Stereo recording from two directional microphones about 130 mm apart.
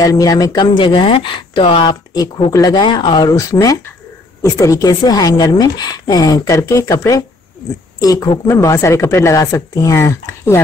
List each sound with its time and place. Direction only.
0.0 s a woman's voice: 30° left (ahead or behind)